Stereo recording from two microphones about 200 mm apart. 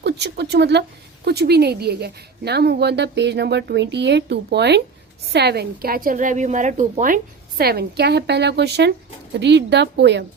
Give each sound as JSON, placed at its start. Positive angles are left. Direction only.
{"t": 0.0, "sound": "a woman's voice", "side_deg": -55}
{"t": 7.6, "sound": "a woman's voice", "side_deg": -50}